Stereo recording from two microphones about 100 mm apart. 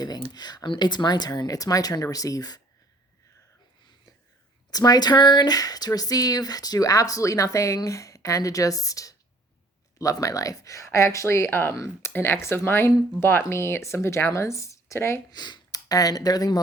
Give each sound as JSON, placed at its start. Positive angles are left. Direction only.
{"t": 0.3, "sound": "speech", "side_deg": 45}
{"t": 4.7, "sound": "speech", "side_deg": 40}
{"t": 15.3, "sound": "speech", "side_deg": 45}